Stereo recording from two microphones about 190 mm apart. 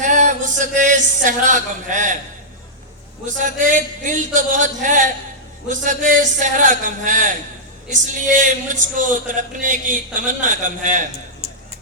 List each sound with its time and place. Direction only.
0.0 s speech: 40° right (ahead or behind)
3.2 s a man's voice: 40° right (ahead or behind)